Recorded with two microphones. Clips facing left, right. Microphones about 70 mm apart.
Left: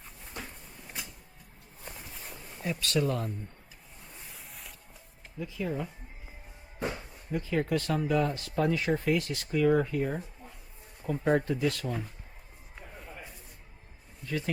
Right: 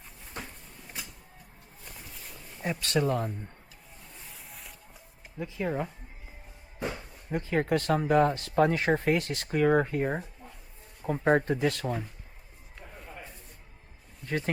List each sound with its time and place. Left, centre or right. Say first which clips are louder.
2.6 s speech: right 1 dB; right
4.3 s a sound: right 1 dB; centre
5.4 s speech: right 3 dB; right
6.7 s music: even; centre
7.3 s speech: right 2 dB; right
14.3 s speech: right 2 dB; right